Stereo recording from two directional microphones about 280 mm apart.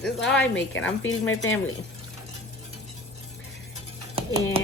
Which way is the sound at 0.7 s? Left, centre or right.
Left.